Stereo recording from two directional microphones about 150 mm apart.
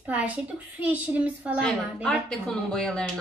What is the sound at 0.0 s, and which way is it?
A woman's voice, 10° right (ahead or behind).